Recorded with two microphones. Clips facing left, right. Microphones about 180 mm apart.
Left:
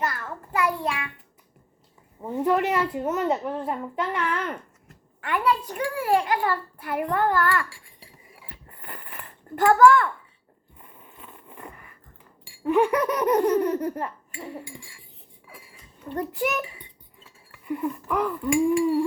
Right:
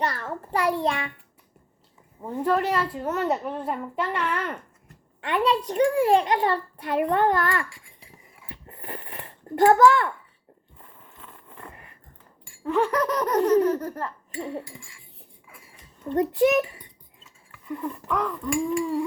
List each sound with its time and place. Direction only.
0.0 s a sound: 35° right (ahead or behind)
0.3 s a child's voice: 30° right (ahead or behind)
2.2 s speech: 5° left (ahead or behind)
5.5 s a child's voice: 25° right (ahead or behind)
8.4 s a sound: 25° right (ahead or behind)
11.0 s a sound: 10° left (ahead or behind)
12.6 s speech: 10° left (ahead or behind)
16.0 s a child's voice: 25° right (ahead or behind)
17.7 s speech: 10° left (ahead or behind)